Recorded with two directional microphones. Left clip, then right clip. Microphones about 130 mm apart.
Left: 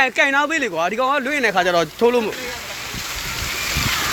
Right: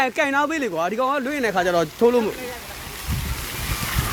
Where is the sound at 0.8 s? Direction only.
35° right (ahead or behind).